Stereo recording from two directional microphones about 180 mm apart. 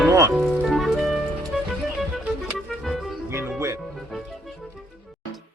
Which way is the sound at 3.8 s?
Centre (ahead or behind).